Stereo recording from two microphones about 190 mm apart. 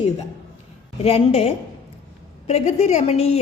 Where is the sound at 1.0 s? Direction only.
35° left (ahead or behind).